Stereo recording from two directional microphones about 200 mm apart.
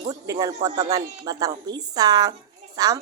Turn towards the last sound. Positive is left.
turn(degrees=-20)  # may be behind; listen again after turning